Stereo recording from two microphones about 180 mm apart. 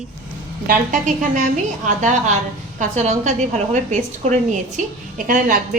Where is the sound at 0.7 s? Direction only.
45° right (ahead or behind).